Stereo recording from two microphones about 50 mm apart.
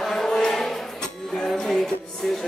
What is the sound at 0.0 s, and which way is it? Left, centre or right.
Music, centre.